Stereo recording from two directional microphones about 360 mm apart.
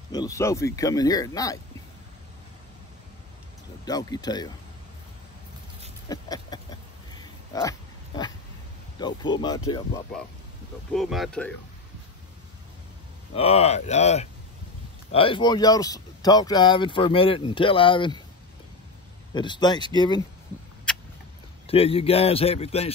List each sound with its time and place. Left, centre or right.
0.1 s speech: centre
3.8 s speech: centre
6.0 s a sound: centre
7.5 s speech: centre
9.0 s speech: centre
10.9 s speech: centre
13.3 s speech: centre
19.3 s speech: centre
20.9 s a sound: centre
21.6 s speech: centre